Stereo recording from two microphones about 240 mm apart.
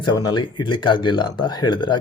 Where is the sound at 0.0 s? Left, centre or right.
Centre.